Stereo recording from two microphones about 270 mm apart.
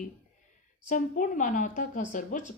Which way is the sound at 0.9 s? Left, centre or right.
Left.